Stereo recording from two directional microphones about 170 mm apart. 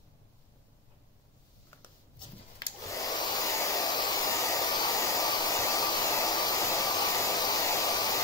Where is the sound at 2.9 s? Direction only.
20° left (ahead or behind).